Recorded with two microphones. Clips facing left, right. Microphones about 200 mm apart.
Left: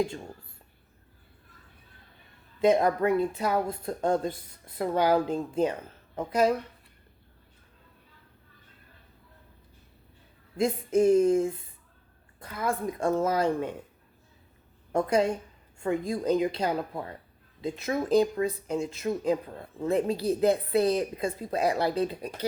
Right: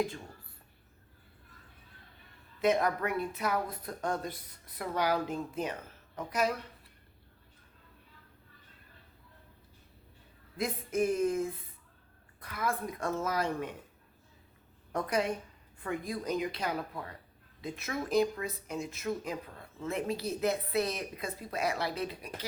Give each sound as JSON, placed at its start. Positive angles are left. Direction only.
{"t": 2.6, "sound": "speech", "side_deg": 30}
{"t": 10.6, "sound": "speech", "side_deg": 30}
{"t": 14.9, "sound": "a woman's voice", "side_deg": 25}